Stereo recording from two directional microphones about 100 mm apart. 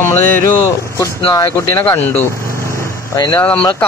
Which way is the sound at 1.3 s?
35° left (ahead or behind).